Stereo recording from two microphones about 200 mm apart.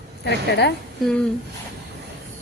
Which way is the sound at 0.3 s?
55° left (ahead or behind).